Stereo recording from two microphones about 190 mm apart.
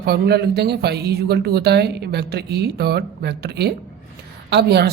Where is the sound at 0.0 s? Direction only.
60° right (ahead or behind).